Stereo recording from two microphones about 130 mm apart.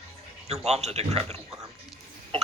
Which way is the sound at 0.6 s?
55° right (ahead or behind).